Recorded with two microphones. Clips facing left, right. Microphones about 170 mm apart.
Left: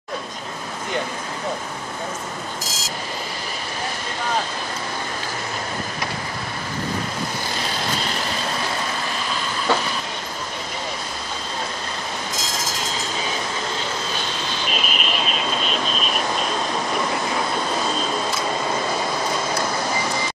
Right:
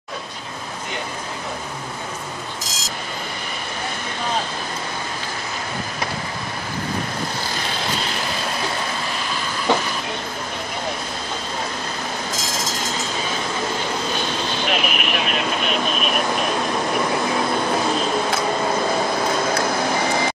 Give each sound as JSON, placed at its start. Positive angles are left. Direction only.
{"t": 9.7, "sound": "vehicle", "side_deg": -15}
{"t": 14.7, "sound": "vehicle", "side_deg": -60}